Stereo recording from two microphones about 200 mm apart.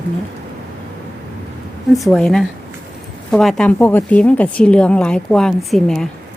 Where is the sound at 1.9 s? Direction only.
Centre (ahead or behind).